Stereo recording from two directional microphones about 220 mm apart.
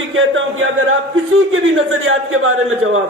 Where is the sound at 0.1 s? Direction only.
60° right (ahead or behind).